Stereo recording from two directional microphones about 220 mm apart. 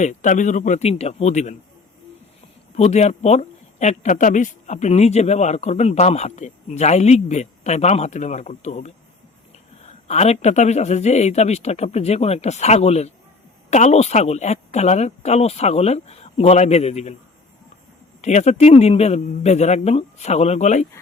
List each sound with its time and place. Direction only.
0.0 s speech: 35° left (ahead or behind)
2.7 s speech: 30° left (ahead or behind)
18.2 s speech: 30° left (ahead or behind)